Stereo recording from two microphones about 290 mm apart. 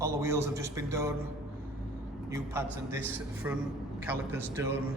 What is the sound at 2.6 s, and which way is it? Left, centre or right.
A man's voice, centre.